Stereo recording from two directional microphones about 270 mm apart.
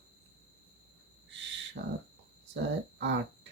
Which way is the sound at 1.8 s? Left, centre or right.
Right.